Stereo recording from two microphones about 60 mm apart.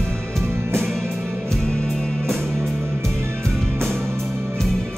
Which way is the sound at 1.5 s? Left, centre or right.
Centre.